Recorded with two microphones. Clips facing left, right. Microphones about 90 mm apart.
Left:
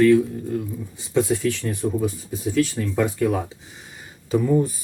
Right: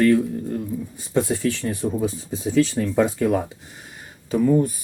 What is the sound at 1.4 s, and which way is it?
Speech, 15° right (ahead or behind).